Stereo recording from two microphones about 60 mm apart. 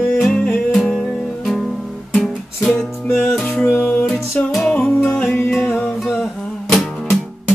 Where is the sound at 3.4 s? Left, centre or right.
Left.